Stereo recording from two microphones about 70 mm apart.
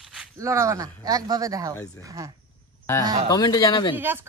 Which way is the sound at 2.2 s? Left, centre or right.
Right.